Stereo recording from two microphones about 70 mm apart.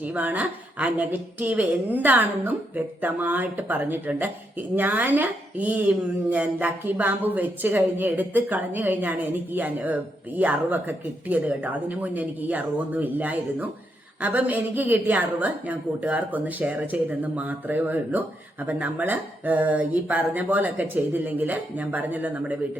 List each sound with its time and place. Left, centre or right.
0.0 s speech: right